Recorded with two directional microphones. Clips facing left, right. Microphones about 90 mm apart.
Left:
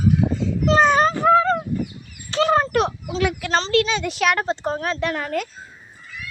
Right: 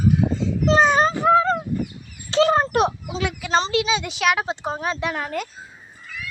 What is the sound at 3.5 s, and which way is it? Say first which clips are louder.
A woman's voice: right 1 dB; 10° right (ahead or behind).